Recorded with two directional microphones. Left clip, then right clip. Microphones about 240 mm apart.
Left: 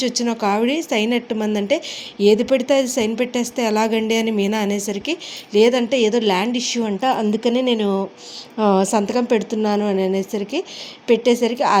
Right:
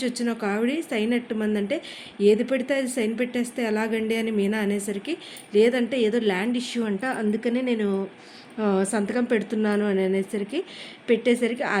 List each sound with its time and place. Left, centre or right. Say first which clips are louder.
0.2 s a woman's voice: left 8 dB; centre